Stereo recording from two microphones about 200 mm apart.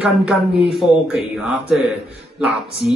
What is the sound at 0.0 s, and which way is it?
Speech, 5° right (ahead or behind).